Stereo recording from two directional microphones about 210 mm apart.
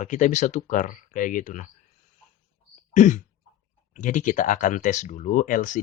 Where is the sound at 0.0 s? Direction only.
35° left (ahead or behind).